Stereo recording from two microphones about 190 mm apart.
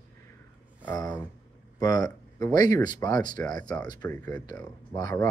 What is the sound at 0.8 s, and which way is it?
Speech, 20° left (ahead or behind).